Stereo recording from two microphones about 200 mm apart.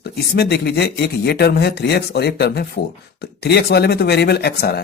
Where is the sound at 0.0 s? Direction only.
55° left (ahead or behind).